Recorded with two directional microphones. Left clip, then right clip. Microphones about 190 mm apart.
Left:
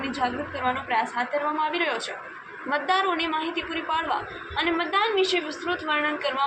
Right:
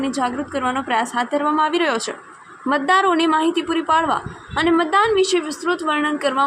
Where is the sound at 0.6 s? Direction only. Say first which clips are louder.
Right 4 dB; 60° right (ahead or behind).